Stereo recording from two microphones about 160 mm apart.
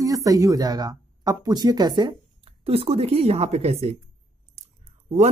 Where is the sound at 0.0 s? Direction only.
20° right (ahead or behind); by 3.7 s 40° right (ahead or behind).